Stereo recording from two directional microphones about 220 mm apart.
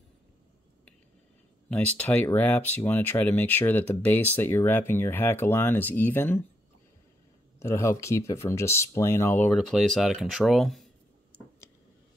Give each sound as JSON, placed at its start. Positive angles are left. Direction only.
{"t": 1.7, "sound": "speech", "side_deg": 5}
{"t": 7.5, "sound": "speech", "side_deg": 10}